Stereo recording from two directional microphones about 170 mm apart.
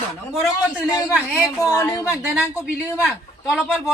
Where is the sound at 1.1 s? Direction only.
5° right (ahead or behind).